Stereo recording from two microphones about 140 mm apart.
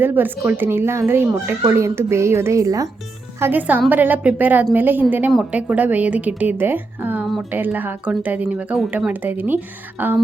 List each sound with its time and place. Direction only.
0.0 s speech: 15° right (ahead or behind)
3.4 s speech: 10° right (ahead or behind)